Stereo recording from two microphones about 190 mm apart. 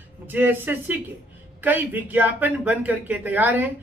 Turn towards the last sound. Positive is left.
turn(degrees=-10)  # may be behind; listen again after turning